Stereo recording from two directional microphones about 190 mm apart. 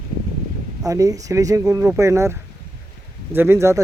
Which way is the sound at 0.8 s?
20° right (ahead or behind).